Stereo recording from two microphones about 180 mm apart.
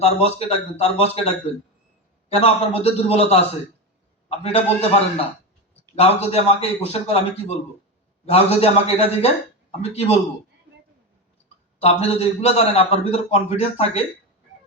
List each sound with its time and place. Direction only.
0.0 s a man's voice: 35° left (ahead or behind)
2.3 s a man's voice: 35° left (ahead or behind)
6.0 s a man's voice: 35° left (ahead or behind)
11.8 s a man's voice: 35° left (ahead or behind)